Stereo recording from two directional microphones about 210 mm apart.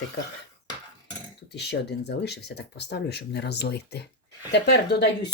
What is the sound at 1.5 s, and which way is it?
Speech, 55° left (ahead or behind).